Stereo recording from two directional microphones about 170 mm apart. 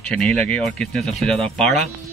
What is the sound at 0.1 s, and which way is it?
Speech, 5° left (ahead or behind).